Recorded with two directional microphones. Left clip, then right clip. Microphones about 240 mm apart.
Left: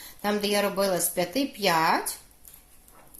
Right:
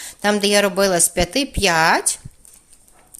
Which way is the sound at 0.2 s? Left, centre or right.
Right.